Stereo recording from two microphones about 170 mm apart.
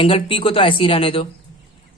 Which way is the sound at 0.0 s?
30° left (ahead or behind).